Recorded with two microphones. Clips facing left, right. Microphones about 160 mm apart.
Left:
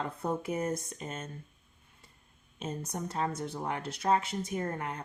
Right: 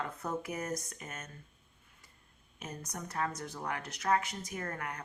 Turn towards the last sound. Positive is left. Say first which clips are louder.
# left 5 dB
turn(degrees=25)  # may be behind; listen again after turning